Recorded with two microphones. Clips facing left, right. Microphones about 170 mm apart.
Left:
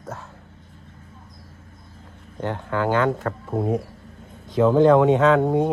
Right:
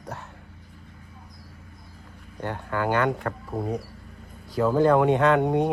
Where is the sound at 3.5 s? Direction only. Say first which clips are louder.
Left 8 dB; centre (ahead or behind); by 5.4 s 15° right (ahead or behind).